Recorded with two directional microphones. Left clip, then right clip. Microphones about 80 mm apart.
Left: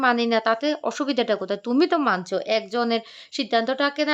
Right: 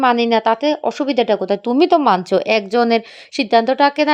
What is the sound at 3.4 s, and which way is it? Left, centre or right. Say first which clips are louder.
Speech: right 9 dB; right.